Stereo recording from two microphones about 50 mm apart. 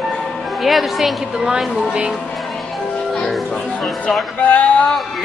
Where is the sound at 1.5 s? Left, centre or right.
Centre.